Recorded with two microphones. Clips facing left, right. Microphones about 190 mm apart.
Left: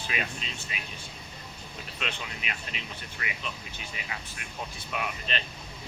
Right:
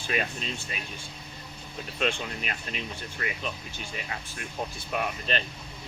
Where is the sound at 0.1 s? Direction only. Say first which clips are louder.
Right 5 dB; 40° right (ahead or behind).